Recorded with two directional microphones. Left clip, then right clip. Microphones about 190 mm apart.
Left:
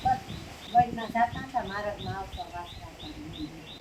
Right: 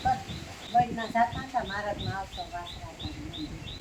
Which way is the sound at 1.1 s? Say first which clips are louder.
Right 1 dB; 10° left (ahead or behind).